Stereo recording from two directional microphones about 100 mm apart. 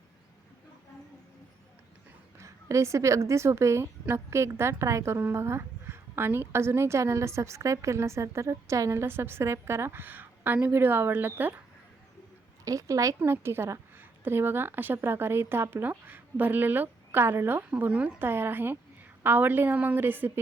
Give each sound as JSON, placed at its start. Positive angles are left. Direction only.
{"t": 2.4, "sound": "a woman's voice", "side_deg": -30}
{"t": 12.6, "sound": "a woman's voice", "side_deg": -35}